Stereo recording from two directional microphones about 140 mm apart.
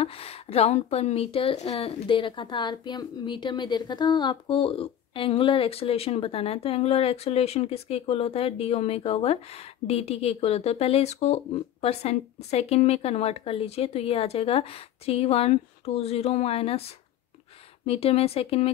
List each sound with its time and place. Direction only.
0.0 s a woman's voice: 45° left (ahead or behind)